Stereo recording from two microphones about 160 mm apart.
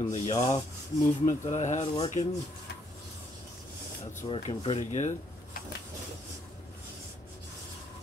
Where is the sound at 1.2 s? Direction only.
50° left (ahead or behind).